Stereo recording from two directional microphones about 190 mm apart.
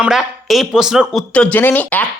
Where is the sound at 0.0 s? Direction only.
Centre (ahead or behind).